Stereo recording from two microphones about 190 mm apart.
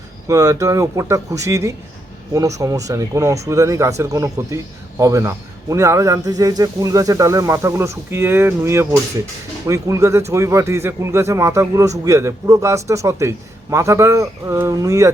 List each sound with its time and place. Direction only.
0.3 s speech: 15° right (ahead or behind)